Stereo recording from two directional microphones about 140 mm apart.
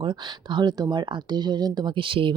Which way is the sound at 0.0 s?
35° right (ahead or behind).